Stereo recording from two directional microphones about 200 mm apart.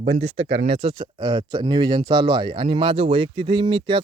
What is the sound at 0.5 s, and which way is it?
Speech, 30° right (ahead or behind).